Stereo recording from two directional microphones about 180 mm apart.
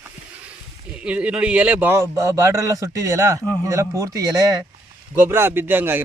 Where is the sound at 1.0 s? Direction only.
5° right (ahead or behind).